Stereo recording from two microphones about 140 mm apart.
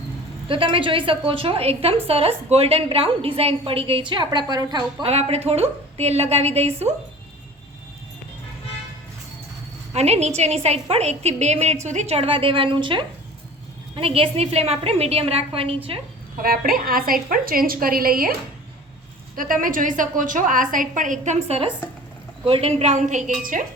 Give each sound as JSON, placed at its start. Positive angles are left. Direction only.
{"t": 0.4, "sound": "a woman's voice", "side_deg": -40}
{"t": 5.0, "sound": "a woman's voice", "side_deg": -45}
{"t": 9.9, "sound": "a woman's voice", "side_deg": -50}
{"t": 16.4, "sound": "a woman's voice", "side_deg": -90}
{"t": 19.4, "sound": "a woman's voice", "side_deg": -80}
{"t": 23.4, "sound": "a woman's voice", "side_deg": -70}